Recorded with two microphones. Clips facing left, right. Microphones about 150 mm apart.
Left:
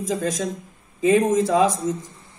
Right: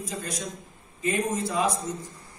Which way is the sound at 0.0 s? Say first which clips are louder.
Left 10 dB; 90° left.